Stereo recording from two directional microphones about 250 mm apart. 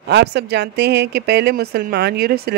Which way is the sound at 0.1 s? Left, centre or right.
Right.